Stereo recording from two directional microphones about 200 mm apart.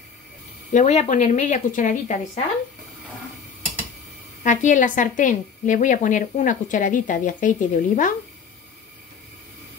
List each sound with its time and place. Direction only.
0.7 s a woman's voice: 35° left (ahead or behind)
4.4 s a woman's voice: 40° left (ahead or behind)